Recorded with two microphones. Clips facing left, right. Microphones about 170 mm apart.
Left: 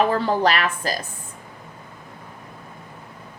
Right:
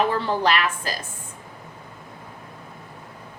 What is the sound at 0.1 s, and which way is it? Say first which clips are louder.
Speech: left 2 dB; 40° left (ahead or behind).